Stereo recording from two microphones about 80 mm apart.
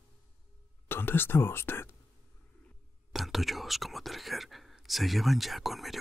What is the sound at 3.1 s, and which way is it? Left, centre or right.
Speech, centre.